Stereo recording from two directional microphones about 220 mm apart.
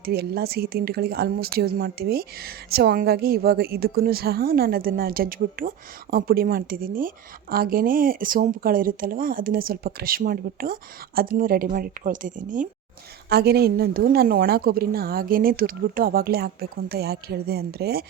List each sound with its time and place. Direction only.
0.0 s speech: 45° right (ahead or behind)